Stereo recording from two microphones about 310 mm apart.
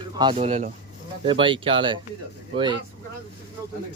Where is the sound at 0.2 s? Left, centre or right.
Centre.